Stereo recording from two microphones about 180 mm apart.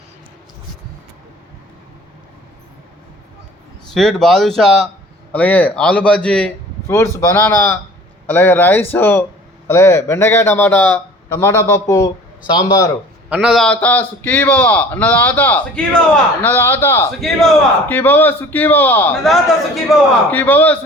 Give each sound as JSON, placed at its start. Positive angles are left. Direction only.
{"t": 3.9, "sound": "a man's voice", "side_deg": 0}
{"t": 13.3, "sound": "speech", "side_deg": -5}
{"t": 17.2, "sound": "speech", "side_deg": 0}
{"t": 19.1, "sound": "speech", "side_deg": 0}
{"t": 20.3, "sound": "speech", "side_deg": 10}